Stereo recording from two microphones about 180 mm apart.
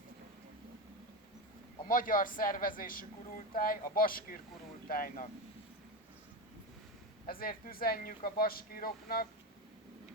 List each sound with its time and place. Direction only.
1.9 s speech: 50° left (ahead or behind)
7.3 s speech: 55° left (ahead or behind)